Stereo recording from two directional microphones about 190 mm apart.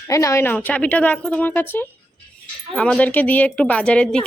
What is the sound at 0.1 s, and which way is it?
A woman's voice, 15° left (ahead or behind).